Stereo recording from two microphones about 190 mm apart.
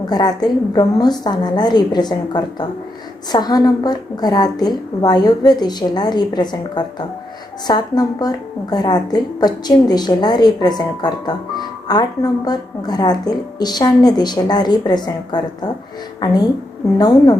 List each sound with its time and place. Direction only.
0.1 s a woman's voice: 20° left (ahead or behind)